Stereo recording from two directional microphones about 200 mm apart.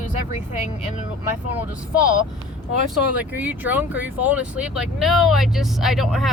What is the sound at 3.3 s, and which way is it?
Speech, 10° right (ahead or behind).